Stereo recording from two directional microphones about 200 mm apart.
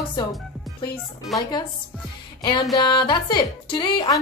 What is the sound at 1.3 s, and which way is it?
Speech, centre (ahead or behind).